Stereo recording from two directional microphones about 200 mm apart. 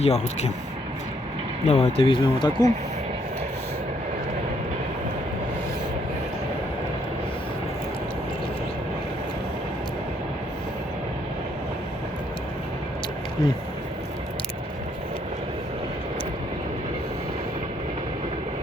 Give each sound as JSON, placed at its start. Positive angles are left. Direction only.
{"t": 0.0, "sound": "speech", "side_deg": 35}
{"t": 1.6, "sound": "speech", "side_deg": 35}